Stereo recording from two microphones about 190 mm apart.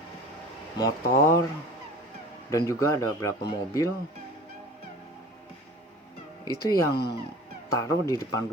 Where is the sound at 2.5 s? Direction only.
15° left (ahead or behind).